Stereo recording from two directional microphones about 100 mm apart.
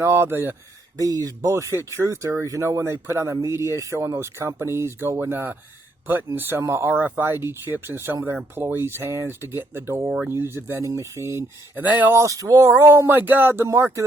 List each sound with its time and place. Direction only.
0.0 s speech: 25° right (ahead or behind)
0.9 s speech: 35° right (ahead or behind)
11.8 s speech: 20° right (ahead or behind)
12.1 s speech: 35° right (ahead or behind)